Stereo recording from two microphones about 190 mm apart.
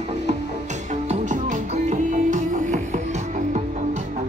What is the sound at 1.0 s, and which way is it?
Music, 40° right (ahead or behind).